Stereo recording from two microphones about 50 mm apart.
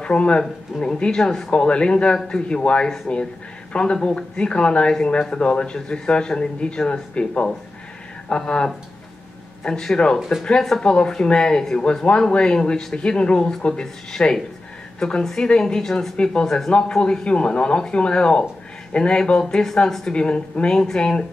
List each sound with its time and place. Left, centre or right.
0.0 s a man's voice: left
14.1 s speech: centre
17.0 s a man's voice: centre